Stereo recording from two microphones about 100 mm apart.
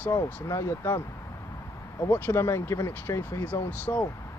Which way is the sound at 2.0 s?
20° left (ahead or behind).